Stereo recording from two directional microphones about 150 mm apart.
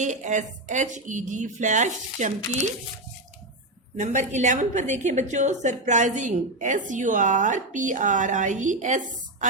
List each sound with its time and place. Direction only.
0.0 s a woman's voice: 55° right (ahead or behind)
3.9 s a woman's voice: 55° right (ahead or behind)